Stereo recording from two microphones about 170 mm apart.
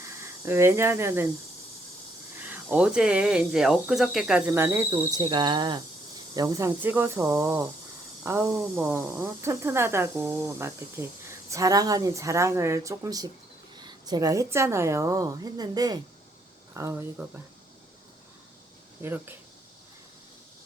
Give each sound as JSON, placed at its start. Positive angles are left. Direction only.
{"t": 0.0, "sound": "speech", "side_deg": -15}
{"t": 2.4, "sound": "speech", "side_deg": -10}
{"t": 19.0, "sound": "speech", "side_deg": -15}